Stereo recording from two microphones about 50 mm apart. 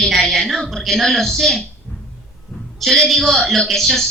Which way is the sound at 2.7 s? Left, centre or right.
Centre.